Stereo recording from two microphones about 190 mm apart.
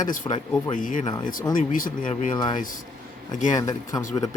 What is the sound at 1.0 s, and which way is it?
Speech, 25° left (ahead or behind).